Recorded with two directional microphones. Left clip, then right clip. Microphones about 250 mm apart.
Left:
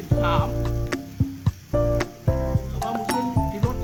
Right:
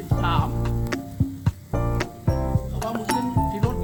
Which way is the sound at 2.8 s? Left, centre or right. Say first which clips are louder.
Even; centre.